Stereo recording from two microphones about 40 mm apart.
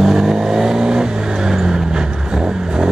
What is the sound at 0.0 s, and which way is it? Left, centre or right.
Vehicle, centre.